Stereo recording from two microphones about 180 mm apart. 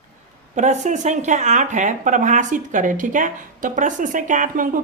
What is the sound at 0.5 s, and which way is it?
Speech, 40° right (ahead or behind).